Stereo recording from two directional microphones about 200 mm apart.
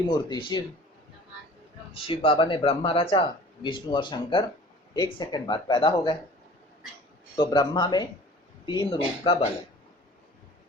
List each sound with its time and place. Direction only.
0.0 s speech: 20° left (ahead or behind)
2.0 s speech: 25° left (ahead or behind)
7.3 s speech: 20° left (ahead or behind)